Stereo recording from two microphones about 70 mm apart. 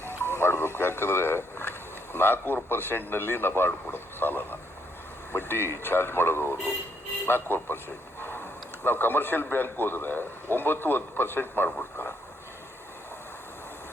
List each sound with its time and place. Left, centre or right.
0.3 s a sound: left
2.1 s a man's voice: left
8.8 s a man's voice: left